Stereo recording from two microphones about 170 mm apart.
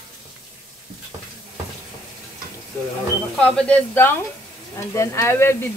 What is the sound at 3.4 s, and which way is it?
Speech, 5° left (ahead or behind).